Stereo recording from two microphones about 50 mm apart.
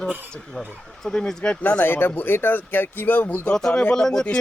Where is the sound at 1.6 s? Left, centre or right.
Left.